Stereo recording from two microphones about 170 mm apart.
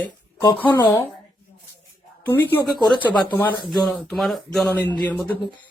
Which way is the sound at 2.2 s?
10° left (ahead or behind).